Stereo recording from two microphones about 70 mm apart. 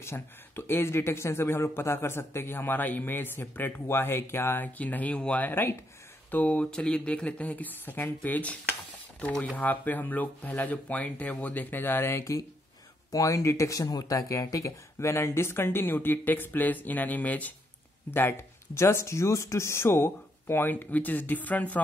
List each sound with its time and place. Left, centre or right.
0.0 s speech: left
4.7 s speech: left
6.3 s speech: centre; by 12.3 s left
13.1 s speech: left
18.1 s speech: left